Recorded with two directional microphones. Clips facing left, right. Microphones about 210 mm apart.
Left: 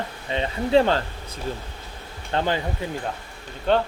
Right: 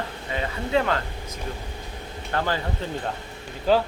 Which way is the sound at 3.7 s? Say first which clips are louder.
Right 1 dB; 5° right (ahead or behind).